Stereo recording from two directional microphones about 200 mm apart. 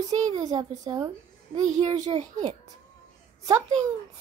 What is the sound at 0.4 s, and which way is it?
A child's voice, 20° right (ahead or behind).